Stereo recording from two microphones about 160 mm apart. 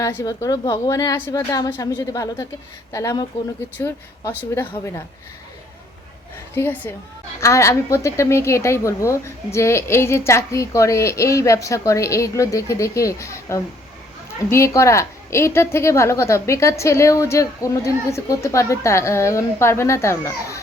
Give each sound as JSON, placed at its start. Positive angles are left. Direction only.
{"t": 0.0, "sound": "a woman's voice", "side_deg": 20}
{"t": 6.5, "sound": "a woman's voice", "side_deg": 10}